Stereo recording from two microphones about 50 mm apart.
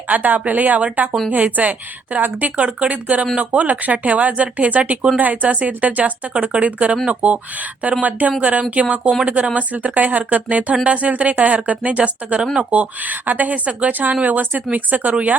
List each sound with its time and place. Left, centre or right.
0.1 s speech: right